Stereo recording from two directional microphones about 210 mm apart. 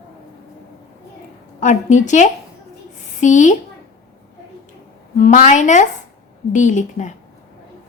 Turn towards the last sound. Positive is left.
turn(degrees=35)  # may be behind; listen again after turning